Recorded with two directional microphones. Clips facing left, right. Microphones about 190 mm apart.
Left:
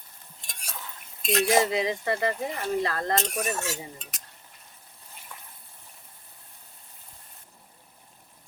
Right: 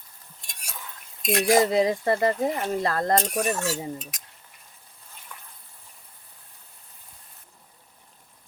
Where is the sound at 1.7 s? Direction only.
45° right (ahead or behind).